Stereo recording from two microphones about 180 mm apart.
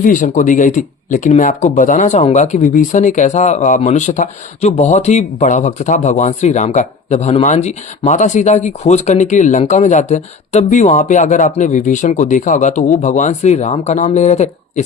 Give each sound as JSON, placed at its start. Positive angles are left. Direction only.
{"t": 0.0, "sound": "speech", "side_deg": 45}